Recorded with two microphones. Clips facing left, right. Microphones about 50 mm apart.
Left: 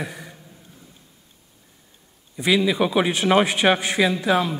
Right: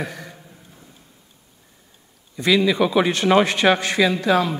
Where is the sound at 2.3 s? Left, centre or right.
Centre.